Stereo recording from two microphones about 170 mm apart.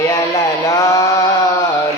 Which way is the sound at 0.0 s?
20° left (ahead or behind).